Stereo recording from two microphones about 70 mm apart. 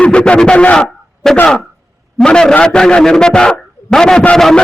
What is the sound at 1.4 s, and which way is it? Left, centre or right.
A man's voice, centre.